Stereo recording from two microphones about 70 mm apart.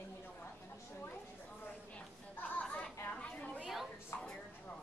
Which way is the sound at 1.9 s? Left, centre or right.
Left.